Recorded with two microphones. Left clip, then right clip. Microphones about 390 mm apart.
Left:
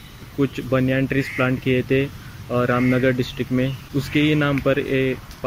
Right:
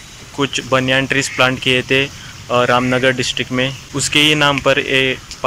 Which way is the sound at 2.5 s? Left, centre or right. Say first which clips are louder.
Right 7 dB; right.